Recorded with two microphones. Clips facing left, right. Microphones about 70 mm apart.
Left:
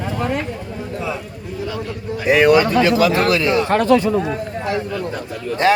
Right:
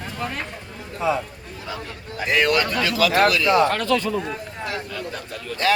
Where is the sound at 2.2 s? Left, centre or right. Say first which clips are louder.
Left 7 dB; centre.